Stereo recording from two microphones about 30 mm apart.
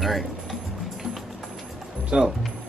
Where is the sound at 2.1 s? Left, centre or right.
Right.